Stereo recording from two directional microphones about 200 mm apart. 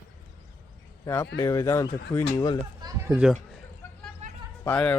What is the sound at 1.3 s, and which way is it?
Speech, 15° left (ahead or behind).